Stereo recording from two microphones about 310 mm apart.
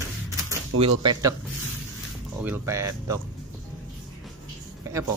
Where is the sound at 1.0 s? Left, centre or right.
Centre.